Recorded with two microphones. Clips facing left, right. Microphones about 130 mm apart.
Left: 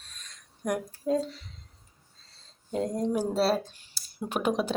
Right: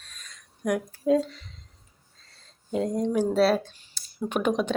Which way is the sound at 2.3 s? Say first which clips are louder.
Right 4 dB; 30° left (ahead or behind).